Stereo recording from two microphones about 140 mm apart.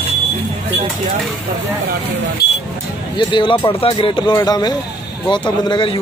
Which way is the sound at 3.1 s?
35° left (ahead or behind).